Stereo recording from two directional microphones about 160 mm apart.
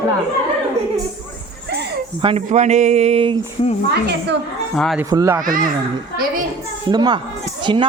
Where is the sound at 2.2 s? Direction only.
35° right (ahead or behind).